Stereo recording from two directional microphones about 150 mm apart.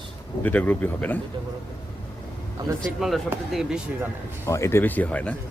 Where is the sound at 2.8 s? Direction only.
Centre (ahead or behind).